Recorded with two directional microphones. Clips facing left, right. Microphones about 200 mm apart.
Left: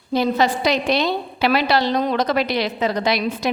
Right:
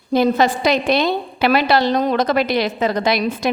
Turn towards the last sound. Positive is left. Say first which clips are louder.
# right 2 dB
turn(degrees=-50)  # may be behind; listen again after turning